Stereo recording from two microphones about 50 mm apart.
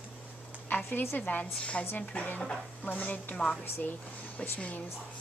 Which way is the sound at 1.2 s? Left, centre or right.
Left.